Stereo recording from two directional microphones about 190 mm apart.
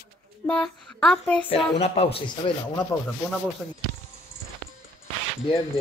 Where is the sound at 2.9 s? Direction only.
5° left (ahead or behind).